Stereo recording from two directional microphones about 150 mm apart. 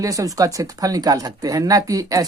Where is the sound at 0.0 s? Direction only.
20° right (ahead or behind).